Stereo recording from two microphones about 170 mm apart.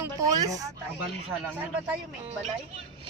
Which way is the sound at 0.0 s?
20° right (ahead or behind).